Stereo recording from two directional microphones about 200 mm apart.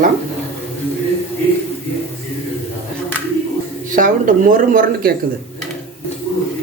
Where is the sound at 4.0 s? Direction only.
40° right (ahead or behind).